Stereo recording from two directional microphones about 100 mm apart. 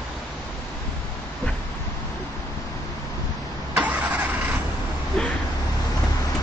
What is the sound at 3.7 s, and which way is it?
Vehicle, 15° right (ahead or behind).